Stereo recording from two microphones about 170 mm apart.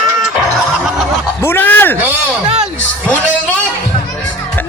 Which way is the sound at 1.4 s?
15° left (ahead or behind).